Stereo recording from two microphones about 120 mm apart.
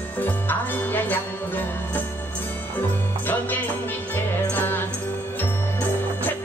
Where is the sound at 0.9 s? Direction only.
15° left (ahead or behind).